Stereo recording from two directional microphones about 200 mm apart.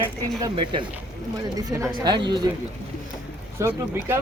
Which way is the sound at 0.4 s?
25° right (ahead or behind).